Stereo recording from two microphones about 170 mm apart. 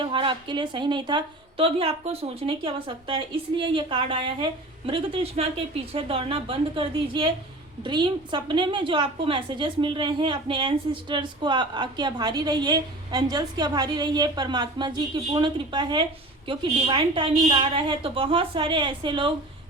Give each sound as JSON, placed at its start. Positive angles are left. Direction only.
{"t": 0.0, "sound": "a woman's voice", "side_deg": -30}